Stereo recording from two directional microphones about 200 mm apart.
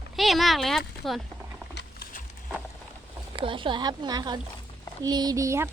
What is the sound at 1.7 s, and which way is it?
Patter, 55° left (ahead or behind).